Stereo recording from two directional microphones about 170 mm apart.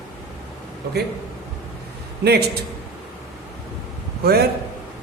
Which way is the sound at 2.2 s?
75° right (ahead or behind).